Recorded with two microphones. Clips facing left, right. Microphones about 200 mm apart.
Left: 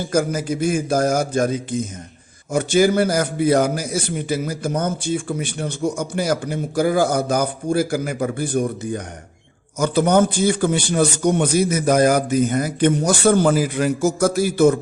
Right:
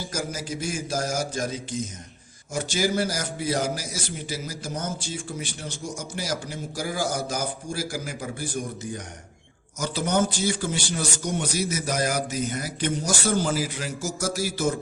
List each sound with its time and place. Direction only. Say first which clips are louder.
0.0 s a man's voice: left 11 dB; 55° left (ahead or behind)